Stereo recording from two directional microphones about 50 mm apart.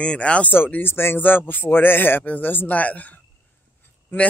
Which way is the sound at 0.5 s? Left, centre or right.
Left.